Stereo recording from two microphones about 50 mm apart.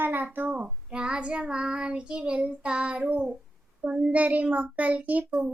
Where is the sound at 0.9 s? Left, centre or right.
Centre.